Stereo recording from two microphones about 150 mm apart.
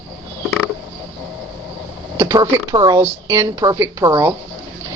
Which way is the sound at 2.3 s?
30° right (ahead or behind).